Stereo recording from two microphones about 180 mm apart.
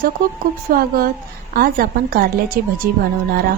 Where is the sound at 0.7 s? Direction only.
55° right (ahead or behind).